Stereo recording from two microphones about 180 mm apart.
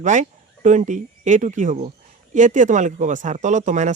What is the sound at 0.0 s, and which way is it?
Speech, 45° right (ahead or behind).